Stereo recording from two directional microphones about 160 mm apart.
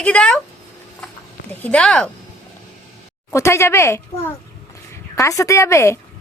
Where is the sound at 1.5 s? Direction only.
10° left (ahead or behind).